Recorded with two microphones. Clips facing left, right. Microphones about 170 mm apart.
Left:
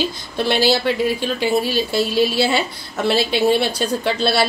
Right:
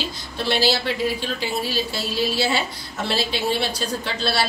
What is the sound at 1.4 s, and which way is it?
A woman's voice, 60° left (ahead or behind).